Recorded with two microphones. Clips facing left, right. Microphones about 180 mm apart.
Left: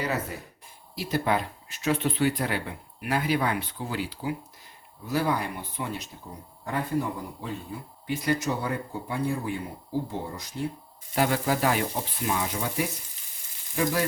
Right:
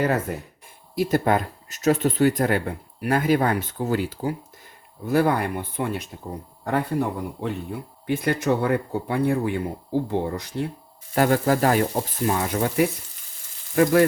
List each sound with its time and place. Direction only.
0.0 s speech: 50° right (ahead or behind)
7.4 s speech: 60° right (ahead or behind)
11.1 s speech: 50° right (ahead or behind)